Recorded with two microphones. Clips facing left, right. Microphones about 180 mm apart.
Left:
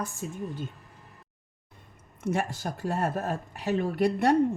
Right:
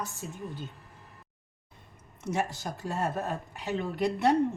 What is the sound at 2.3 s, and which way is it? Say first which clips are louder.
Speech: even; 55° left (ahead or behind).